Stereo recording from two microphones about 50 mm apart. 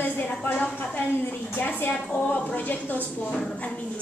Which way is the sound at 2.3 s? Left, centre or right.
Left.